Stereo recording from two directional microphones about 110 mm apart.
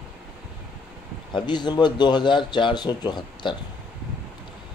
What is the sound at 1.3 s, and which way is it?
Speech, 45° left (ahead or behind).